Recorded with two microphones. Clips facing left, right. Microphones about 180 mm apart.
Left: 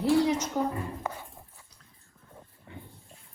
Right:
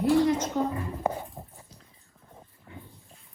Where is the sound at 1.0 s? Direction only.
30° right (ahead or behind).